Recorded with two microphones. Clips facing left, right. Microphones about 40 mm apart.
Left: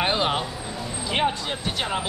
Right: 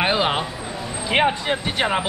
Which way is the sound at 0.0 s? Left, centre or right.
Centre.